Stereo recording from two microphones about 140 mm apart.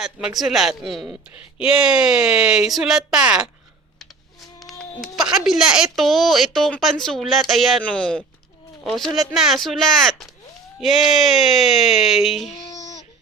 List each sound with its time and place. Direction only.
0.0 s a woman's voice: 5° right (ahead or behind)
5.0 s a woman's voice: 5° right (ahead or behind)
12.7 s a sound: 25° left (ahead or behind)